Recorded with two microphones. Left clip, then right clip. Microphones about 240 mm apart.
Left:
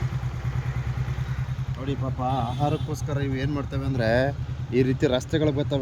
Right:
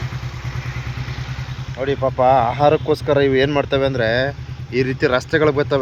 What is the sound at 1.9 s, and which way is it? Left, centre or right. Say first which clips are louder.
Speech: right 14 dB; right.